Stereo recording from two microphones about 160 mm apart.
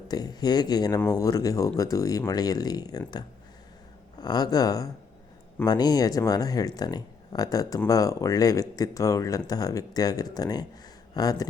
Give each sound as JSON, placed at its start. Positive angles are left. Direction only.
{"t": 0.1, "sound": "speech", "side_deg": 25}
{"t": 4.2, "sound": "speech", "side_deg": 25}